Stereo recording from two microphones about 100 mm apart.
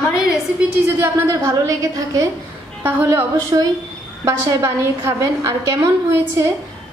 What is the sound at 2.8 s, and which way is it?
Speech, 20° right (ahead or behind).